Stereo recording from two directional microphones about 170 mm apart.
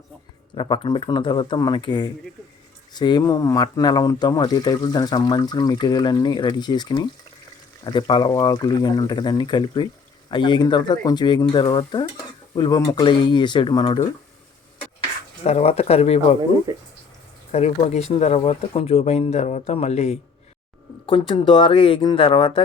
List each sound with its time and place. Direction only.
0.5 s speech: 30° left (ahead or behind)
15.4 s speech: 40° left (ahead or behind)
17.5 s speech: 40° left (ahead or behind)
21.1 s speech: 30° left (ahead or behind)